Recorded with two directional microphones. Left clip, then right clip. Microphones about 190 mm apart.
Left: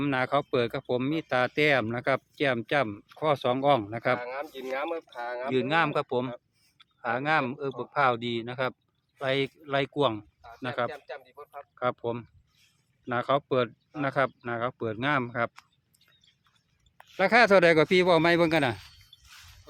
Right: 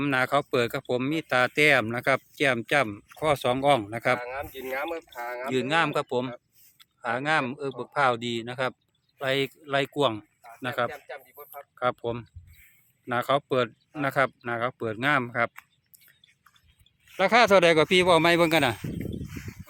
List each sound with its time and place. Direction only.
0.0 s speech: centre (ahead or behind)
5.1 s speech: 20° right (ahead or behind)
5.5 s speech: centre (ahead or behind)
17.2 s speech: 5° left (ahead or behind)